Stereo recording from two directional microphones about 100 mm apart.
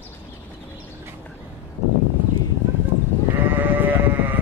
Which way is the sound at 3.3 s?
20° right (ahead or behind).